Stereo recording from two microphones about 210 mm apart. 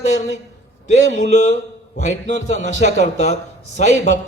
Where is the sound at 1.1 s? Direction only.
35° left (ahead or behind).